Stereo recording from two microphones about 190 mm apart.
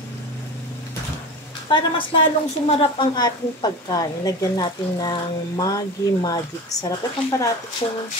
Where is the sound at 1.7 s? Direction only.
25° left (ahead or behind).